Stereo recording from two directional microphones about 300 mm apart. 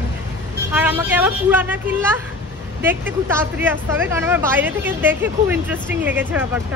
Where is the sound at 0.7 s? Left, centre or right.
Centre.